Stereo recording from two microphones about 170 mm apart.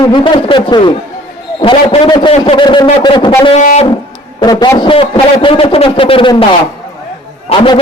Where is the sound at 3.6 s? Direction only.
45° left (ahead or behind).